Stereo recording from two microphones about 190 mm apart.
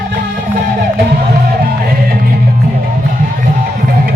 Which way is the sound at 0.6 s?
55° right (ahead or behind).